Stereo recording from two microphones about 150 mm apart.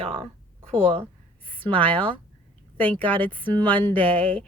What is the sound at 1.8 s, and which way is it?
Speech, 10° left (ahead or behind).